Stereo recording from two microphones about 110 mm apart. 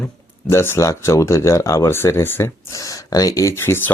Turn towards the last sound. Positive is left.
turn(degrees=20)  # may be behind; listen again after turning